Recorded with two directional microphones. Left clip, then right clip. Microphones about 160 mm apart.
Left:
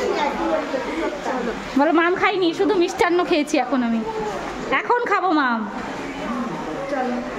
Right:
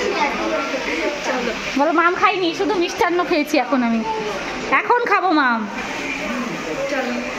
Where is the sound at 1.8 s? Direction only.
35° left (ahead or behind).